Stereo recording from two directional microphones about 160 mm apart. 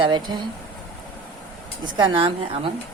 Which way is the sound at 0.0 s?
30° right (ahead or behind).